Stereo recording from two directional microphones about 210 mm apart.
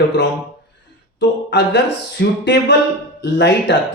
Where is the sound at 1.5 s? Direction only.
55° left (ahead or behind).